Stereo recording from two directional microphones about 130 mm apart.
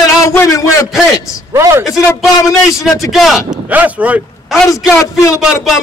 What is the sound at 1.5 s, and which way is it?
Speech, 20° right (ahead or behind).